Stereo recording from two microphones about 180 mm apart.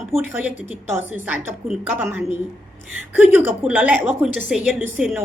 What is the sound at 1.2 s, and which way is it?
A woman's voice, 10° right (ahead or behind).